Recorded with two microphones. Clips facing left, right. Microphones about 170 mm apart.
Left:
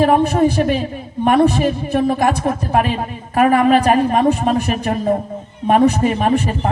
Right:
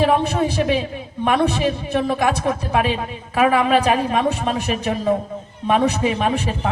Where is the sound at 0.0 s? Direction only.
50° left (ahead or behind).